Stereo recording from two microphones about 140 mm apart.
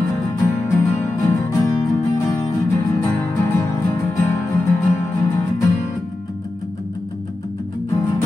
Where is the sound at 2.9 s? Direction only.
20° left (ahead or behind).